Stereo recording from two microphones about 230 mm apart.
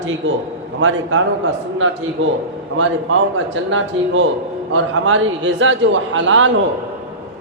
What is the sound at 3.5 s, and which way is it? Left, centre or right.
A man's voice, right.